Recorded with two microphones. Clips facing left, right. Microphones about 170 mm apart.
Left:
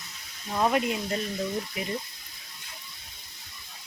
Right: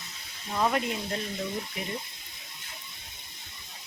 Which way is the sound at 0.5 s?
10° left (ahead or behind).